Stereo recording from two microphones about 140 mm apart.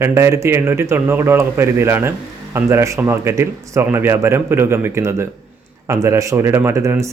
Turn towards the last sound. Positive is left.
turn(degrees=-20)  # may be behind; listen again after turning